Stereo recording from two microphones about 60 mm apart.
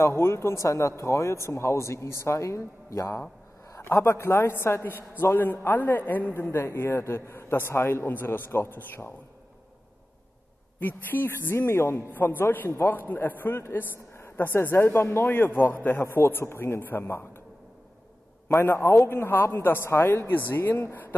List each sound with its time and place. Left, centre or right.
0.0 s speech: left
3.8 s a man's voice: left
5.7 s a man's voice: left
10.8 s a man's voice: left
12.1 s a man's voice: left
13.1 s a man's voice: left
19.0 s a man's voice: left